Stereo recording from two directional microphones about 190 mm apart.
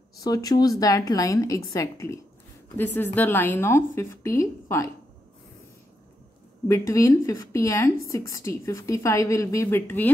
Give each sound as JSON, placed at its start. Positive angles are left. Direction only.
{"t": 0.2, "sound": "a woman's voice", "side_deg": 20}
{"t": 6.7, "sound": "a woman's voice", "side_deg": 15}